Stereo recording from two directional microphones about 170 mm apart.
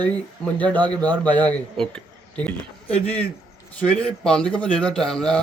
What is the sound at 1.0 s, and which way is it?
Speech, 25° right (ahead or behind).